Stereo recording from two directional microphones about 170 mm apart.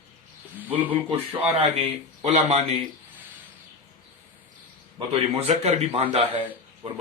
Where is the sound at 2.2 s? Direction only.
40° right (ahead or behind).